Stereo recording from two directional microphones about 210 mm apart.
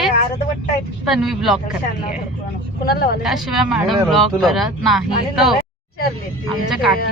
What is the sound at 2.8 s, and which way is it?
Speech, 45° left (ahead or behind).